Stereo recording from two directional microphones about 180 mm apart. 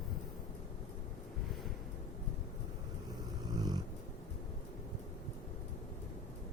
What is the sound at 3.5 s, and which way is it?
Dog, 20° right (ahead or behind).